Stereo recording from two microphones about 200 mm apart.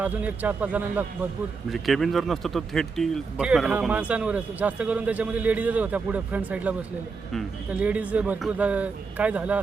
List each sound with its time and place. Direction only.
0.0 s speech: 5° right (ahead or behind)